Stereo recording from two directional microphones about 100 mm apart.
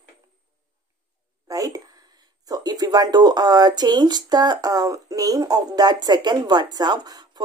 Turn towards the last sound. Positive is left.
turn(degrees=-45)  # may be behind; listen again after turning